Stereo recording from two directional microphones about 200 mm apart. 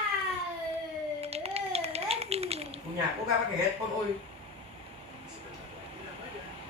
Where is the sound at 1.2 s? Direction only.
30° right (ahead or behind).